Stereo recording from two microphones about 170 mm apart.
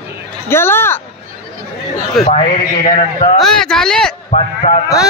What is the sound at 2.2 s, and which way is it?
A man's voice, 40° left (ahead or behind).